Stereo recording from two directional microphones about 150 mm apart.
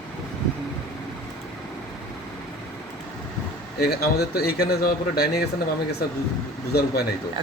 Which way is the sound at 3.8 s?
90° left.